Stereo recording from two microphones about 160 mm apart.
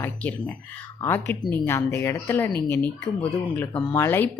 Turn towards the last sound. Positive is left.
turn(degrees=15)  # may be behind; listen again after turning